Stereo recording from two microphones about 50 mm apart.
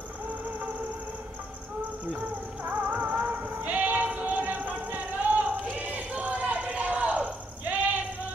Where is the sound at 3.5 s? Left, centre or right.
Right.